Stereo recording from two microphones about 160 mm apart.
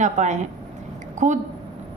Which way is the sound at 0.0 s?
50° right (ahead or behind).